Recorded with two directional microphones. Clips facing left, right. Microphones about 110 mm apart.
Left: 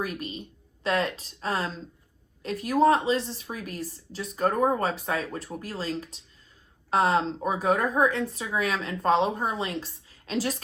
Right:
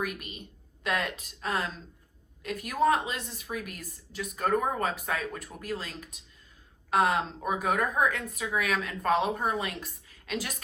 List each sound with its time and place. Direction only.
0.0 s a woman's voice: 35° left (ahead or behind)